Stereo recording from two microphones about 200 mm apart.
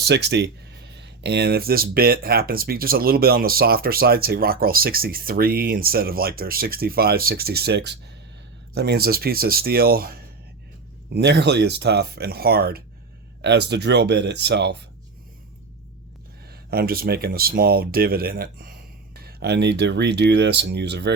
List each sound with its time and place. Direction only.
0.0 s speech: 60° right (ahead or behind)
16.5 s speech: 50° right (ahead or behind)